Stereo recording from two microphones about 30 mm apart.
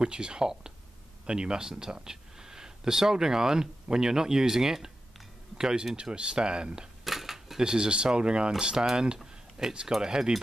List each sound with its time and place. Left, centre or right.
0.0 s speech: right
7.1 s speech: centre; by 9.2 s right
9.2 s a sound: centre
10.0 s speech: right